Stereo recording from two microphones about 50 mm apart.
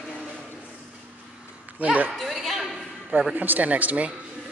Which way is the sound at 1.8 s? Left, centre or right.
Right.